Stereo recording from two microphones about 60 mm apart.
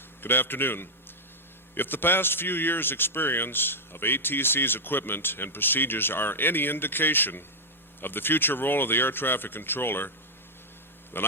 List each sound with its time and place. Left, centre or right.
0.2 s a man's voice: left
11.1 s a man's voice: left